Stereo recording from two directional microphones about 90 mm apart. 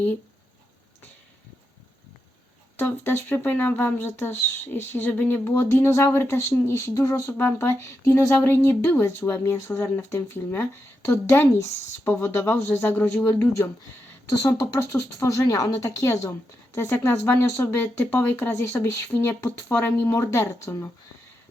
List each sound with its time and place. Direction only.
2.7 s speech: 25° left (ahead or behind)
14.3 s speech: 35° left (ahead or behind)